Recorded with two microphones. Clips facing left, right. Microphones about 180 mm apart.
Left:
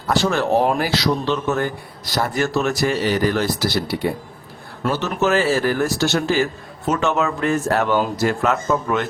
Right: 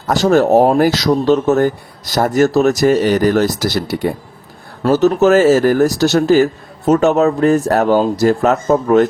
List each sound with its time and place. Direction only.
0.1 s speech: 45° right (ahead or behind)